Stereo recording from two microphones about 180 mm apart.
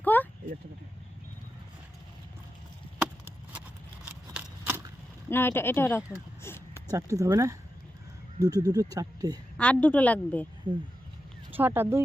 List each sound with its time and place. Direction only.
0.0 s a sound: 10° left (ahead or behind)
3.0 s chop: 10° right (ahead or behind)
4.0 s scissors: 10° right (ahead or behind)
5.3 s a woman's voice: 10° left (ahead or behind)
6.1 s a sound: 15° left (ahead or behind)
6.9 s speech: 15° right (ahead or behind)
8.6 s speech: 20° right (ahead or behind)
9.6 s a woman's voice: 5° left (ahead or behind)
10.7 s speech: 30° right (ahead or behind)
11.5 s speech: 10° right (ahead or behind)